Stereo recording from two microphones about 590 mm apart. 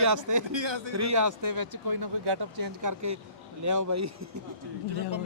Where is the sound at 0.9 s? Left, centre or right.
Right.